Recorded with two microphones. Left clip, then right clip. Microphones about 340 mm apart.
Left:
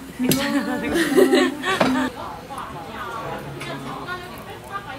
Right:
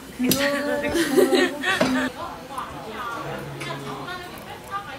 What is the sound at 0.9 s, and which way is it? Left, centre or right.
Speech, left.